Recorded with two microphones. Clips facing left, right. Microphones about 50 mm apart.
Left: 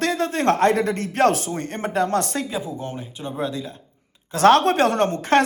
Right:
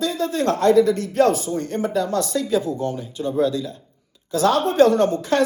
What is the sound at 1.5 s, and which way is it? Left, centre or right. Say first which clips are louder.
Speech: right 3 dB; left.